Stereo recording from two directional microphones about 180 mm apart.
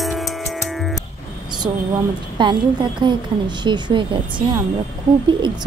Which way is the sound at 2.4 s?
25° right (ahead or behind).